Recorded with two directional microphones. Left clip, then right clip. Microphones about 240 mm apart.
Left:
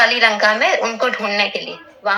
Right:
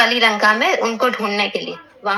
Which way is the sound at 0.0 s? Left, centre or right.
Right.